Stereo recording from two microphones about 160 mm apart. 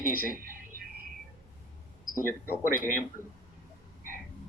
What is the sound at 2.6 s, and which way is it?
Speech, 60° right (ahead or behind).